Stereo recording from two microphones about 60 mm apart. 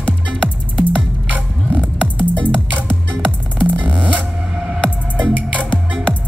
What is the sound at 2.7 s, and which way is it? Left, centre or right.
Music, right.